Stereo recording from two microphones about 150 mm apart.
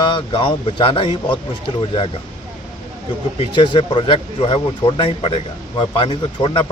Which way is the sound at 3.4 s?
35° left (ahead or behind).